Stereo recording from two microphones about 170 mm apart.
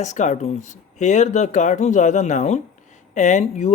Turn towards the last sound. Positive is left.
turn(degrees=40)  # may be behind; listen again after turning